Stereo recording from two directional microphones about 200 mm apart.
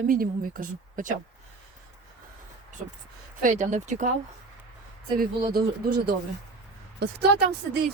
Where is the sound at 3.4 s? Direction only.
35° right (ahead or behind).